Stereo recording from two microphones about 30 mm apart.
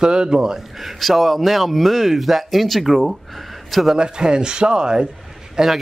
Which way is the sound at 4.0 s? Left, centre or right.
Right.